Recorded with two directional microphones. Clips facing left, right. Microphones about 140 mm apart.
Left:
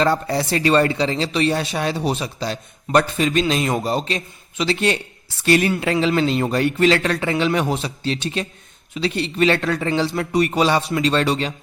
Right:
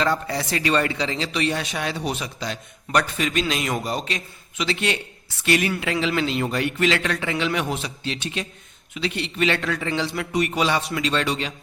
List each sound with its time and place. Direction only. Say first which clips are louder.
0.0 s speech: left 4 dB; 35° left (ahead or behind)